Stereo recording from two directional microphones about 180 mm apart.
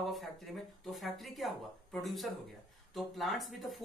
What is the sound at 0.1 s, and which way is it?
Speech, centre (ahead or behind).